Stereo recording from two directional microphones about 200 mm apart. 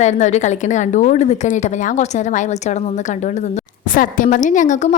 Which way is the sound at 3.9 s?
40° left (ahead or behind).